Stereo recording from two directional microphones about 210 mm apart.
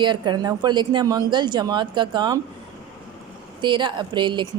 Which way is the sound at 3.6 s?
20° right (ahead or behind).